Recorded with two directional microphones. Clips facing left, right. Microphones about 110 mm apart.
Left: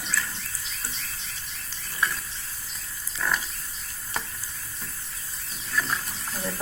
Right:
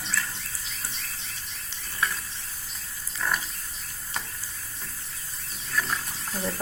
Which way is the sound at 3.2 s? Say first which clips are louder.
Left 1 dB; 15° right (ahead or behind).